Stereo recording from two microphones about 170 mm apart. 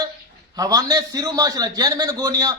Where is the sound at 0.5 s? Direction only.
20° right (ahead or behind).